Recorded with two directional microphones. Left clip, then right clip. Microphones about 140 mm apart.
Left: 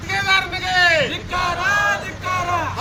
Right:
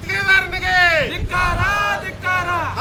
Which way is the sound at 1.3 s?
15° left (ahead or behind).